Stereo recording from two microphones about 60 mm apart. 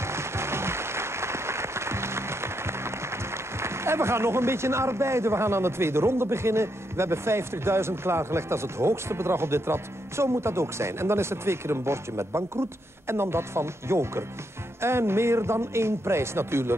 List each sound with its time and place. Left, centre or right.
0.0 s applause: right
14.8 s speech: right